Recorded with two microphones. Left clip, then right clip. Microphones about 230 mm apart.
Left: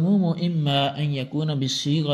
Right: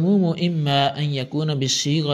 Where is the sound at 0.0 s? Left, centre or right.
Right.